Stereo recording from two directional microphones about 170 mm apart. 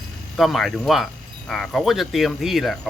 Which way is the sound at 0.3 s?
Centre (ahead or behind).